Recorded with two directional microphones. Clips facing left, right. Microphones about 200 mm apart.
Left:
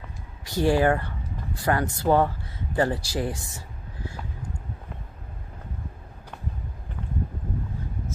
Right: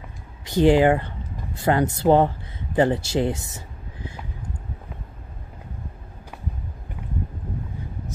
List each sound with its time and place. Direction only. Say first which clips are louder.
0.5 s speech: right 5 dB; 20° right (ahead or behind)